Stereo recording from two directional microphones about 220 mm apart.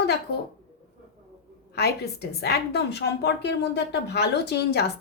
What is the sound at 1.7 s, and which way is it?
A woman's voice, 45° left (ahead or behind).